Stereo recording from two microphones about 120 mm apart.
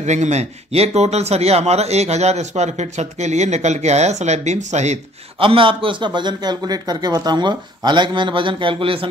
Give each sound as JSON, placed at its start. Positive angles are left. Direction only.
{"t": 0.0, "sound": "speech", "side_deg": -75}
{"t": 5.4, "sound": "speech", "side_deg": -45}